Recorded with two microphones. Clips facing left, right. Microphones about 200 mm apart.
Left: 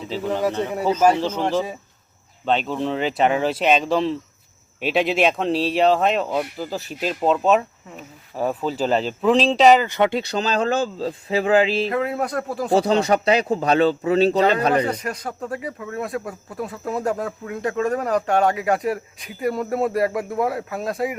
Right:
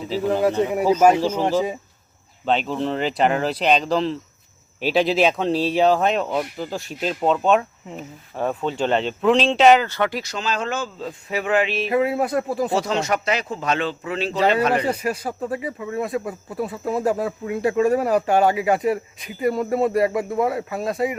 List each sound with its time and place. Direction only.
0.0 s speech: 5° right (ahead or behind)
9.8 s speech: 20° left (ahead or behind)
11.9 s speech: 5° right (ahead or behind)
12.7 s speech: 35° left (ahead or behind)
14.8 s speech: 5° right (ahead or behind)